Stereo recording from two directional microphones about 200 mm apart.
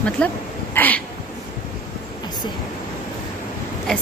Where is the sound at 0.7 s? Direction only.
10° left (ahead or behind).